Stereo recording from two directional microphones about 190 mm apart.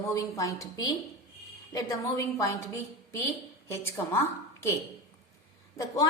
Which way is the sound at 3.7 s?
15° left (ahead or behind).